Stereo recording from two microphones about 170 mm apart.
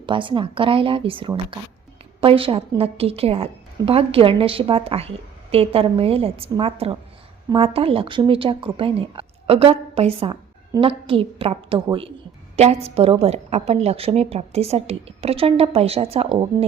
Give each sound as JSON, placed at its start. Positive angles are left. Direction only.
{"t": 0.0, "sound": "a woman's voice", "side_deg": -30}